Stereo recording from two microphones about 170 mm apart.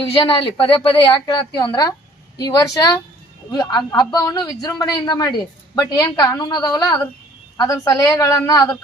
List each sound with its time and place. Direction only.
0.0 s a man's voice: 30° left (ahead or behind)
1.0 s a woman's voice: 15° left (ahead or behind)
1.3 s a man's voice: 25° left (ahead or behind)